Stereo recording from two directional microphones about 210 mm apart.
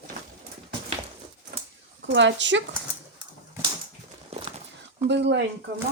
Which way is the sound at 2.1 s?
60° right (ahead or behind).